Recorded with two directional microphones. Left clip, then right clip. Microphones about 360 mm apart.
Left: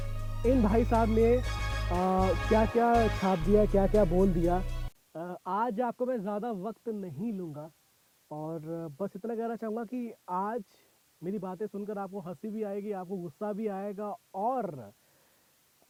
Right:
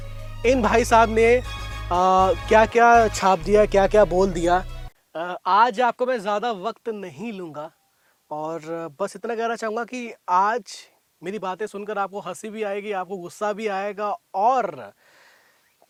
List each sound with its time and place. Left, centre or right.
0.0 s speech: centre
13.1 s speech: right
13.4 s speech: centre